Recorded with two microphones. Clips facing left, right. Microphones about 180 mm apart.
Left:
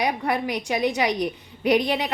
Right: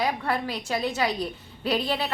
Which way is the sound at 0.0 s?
15° left (ahead or behind).